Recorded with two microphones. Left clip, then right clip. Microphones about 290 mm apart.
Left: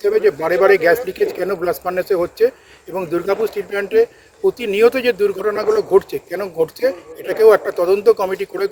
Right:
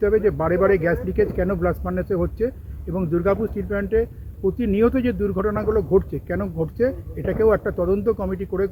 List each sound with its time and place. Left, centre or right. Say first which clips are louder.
0.0 s speech: left 4 dB; centre